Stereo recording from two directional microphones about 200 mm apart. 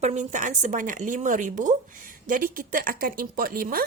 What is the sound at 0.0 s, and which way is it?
A woman's voice, 35° right (ahead or behind).